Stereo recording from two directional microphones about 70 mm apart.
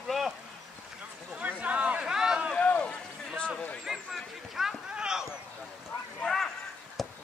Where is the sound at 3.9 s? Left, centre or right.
Centre.